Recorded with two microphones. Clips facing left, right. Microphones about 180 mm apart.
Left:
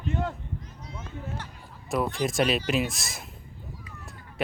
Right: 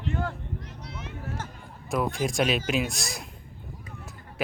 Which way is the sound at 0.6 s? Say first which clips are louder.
Right 2 dB; 75° right (ahead or behind).